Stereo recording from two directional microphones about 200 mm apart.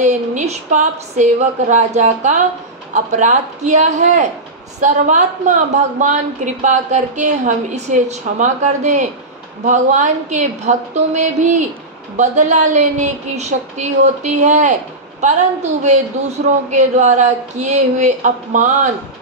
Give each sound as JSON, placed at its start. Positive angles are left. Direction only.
{"t": 0.0, "sound": "a woman's voice", "side_deg": -35}